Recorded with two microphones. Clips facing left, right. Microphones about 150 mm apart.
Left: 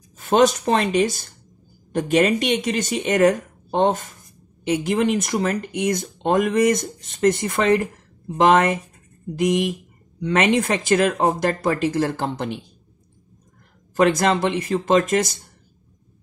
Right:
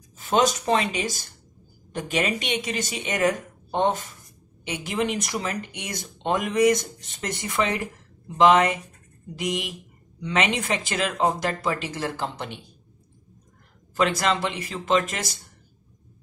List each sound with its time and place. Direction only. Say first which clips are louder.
0.2 s speech: left 5 dB; 50° left (ahead or behind)
13.9 s speech: left 5 dB; 45° left (ahead or behind)